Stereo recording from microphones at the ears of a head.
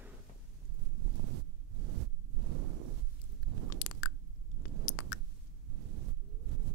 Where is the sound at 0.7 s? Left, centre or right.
Right.